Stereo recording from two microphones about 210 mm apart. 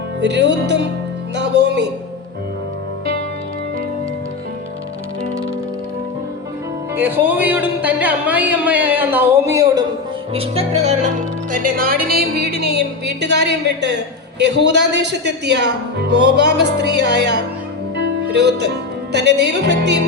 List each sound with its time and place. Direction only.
0.2 s music: 55° right (ahead or behind)
6.9 s speech: 10° right (ahead or behind)
10.3 s music: 30° right (ahead or behind)
11.5 s speech: 40° right (ahead or behind)
17.9 s music: 55° right (ahead or behind)